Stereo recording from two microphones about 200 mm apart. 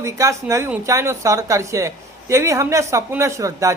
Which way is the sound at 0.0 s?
15° right (ahead or behind).